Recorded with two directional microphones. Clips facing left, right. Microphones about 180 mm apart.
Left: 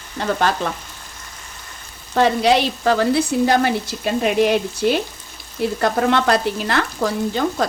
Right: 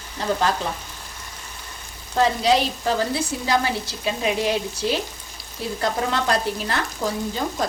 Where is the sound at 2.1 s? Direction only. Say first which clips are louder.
Left 3 dB; 65° left (ahead or behind).